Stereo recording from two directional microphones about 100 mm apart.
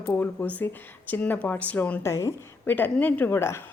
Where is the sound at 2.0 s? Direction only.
30° left (ahead or behind).